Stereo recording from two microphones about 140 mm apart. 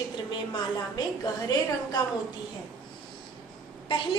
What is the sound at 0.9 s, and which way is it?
A woman's voice, 30° left (ahead or behind).